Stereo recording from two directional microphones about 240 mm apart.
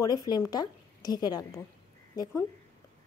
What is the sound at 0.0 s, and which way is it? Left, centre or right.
A woman's voice, centre.